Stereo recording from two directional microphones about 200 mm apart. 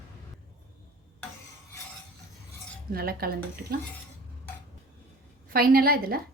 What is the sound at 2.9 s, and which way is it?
Speech, 50° right (ahead or behind).